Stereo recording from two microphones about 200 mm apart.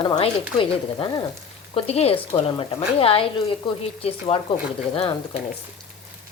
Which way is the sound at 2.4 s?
30° left (ahead or behind).